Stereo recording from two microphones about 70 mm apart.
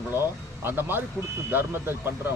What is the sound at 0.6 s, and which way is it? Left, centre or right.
A man's voice, right.